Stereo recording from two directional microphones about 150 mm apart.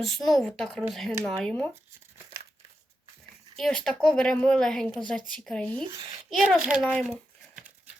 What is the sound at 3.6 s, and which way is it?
Speech, 5° left (ahead or behind).